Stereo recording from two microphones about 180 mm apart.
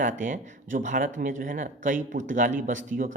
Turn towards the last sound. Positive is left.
turn(degrees=-45)  # may be behind; listen again after turning